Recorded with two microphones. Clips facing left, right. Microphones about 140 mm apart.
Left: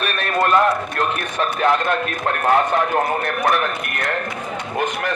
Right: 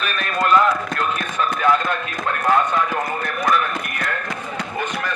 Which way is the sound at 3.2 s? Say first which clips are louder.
Left 1 dB; 65° left (ahead or behind).